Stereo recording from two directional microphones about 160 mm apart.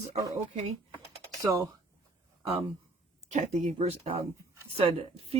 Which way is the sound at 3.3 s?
50° right (ahead or behind).